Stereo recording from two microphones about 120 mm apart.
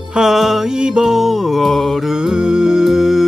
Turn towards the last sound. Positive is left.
turn(degrees=0)  # may be behind; listen again after turning